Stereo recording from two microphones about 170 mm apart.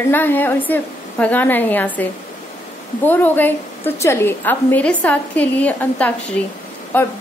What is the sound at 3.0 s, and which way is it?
A woman's voice, 10° left (ahead or behind).